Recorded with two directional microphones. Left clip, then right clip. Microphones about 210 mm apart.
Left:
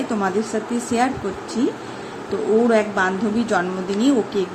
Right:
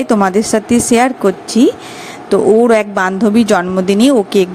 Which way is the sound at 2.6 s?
45° right (ahead or behind).